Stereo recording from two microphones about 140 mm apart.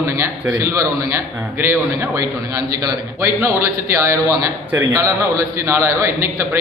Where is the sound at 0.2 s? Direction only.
20° right (ahead or behind).